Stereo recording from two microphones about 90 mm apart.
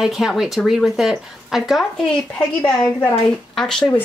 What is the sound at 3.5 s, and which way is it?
Speech, 5° left (ahead or behind).